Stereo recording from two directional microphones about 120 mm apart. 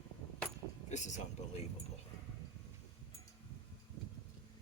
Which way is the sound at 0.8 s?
85° left.